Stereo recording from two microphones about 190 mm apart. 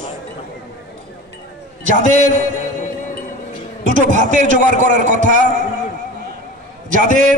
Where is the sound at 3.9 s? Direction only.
40° right (ahead or behind).